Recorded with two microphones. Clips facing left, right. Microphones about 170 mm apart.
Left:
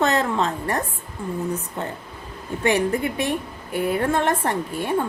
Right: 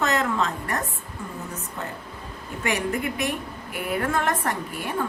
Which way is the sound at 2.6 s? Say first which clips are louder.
Left 5 dB; 30° left (ahead or behind).